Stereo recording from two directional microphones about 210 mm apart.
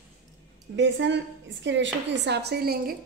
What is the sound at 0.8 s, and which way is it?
A woman's voice, 60° right (ahead or behind).